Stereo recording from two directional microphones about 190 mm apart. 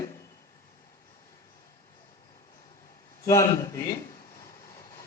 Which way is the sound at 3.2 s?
15° left (ahead or behind).